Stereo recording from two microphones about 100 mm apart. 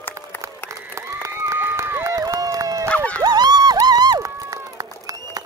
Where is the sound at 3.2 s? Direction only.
45° right (ahead or behind).